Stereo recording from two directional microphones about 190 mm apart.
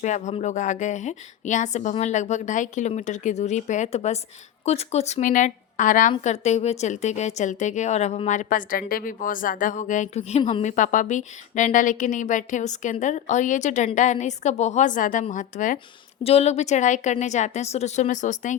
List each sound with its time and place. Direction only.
0.0 s speech: 40° left (ahead or behind)